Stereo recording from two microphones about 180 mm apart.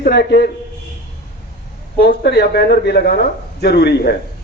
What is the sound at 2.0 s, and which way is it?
A man's voice, 65° left (ahead or behind).